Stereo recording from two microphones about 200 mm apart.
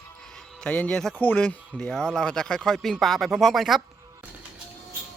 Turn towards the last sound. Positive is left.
turn(degrees=0)  # may be behind; listen again after turning